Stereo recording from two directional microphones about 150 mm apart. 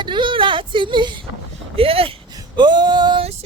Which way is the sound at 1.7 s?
40° right (ahead or behind).